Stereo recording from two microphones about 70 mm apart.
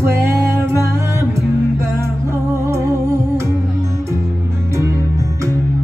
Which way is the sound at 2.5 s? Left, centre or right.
Right.